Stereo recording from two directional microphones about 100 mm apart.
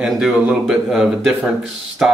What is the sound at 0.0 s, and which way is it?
Speech, 5° right (ahead or behind).